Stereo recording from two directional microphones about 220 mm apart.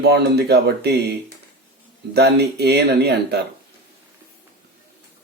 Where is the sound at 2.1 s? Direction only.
50° right (ahead or behind).